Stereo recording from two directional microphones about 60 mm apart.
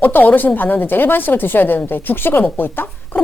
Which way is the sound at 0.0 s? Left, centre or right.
Left.